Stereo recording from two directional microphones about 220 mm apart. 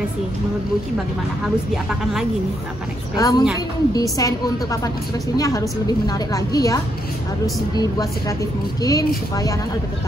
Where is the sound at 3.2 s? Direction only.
15° left (ahead or behind).